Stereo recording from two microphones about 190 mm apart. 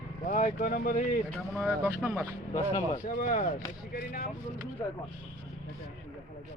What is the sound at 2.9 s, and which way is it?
Speech, 45° left (ahead or behind).